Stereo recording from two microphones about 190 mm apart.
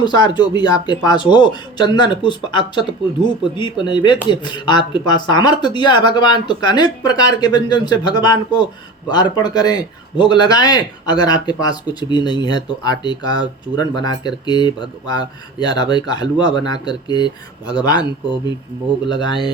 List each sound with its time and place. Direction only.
0.0 s a man's voice: 20° left (ahead or behind)